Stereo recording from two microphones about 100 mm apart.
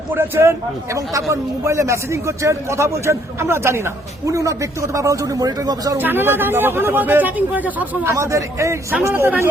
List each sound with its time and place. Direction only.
0.1 s a man's voice: 20° right (ahead or behind); by 6.0 s 35° right (ahead or behind)
6.0 s a man's voice: 20° right (ahead or behind)
8.1 s a man's voice: 30° right (ahead or behind)